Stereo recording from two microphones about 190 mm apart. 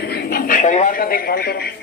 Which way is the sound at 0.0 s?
55° left (ahead or behind).